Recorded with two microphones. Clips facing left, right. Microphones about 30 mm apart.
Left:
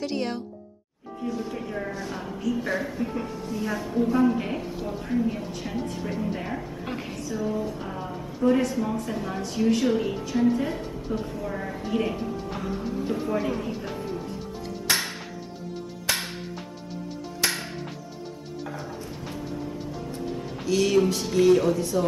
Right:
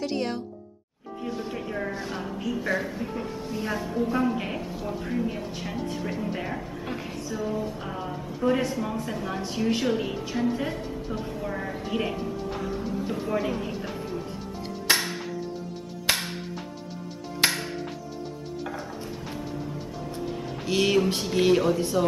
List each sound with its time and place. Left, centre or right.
0.0 s a woman's voice: centre
1.2 s music: centre
1.6 s a woman's voice: centre
2.5 s a woman's voice: centre
3.3 s a woman's voice: centre
3.7 s a woman's voice: centre
4.6 s a woman's voice: centre
12.2 s music: centre
17.4 s music: right
18.7 s music: centre
20.6 s music: right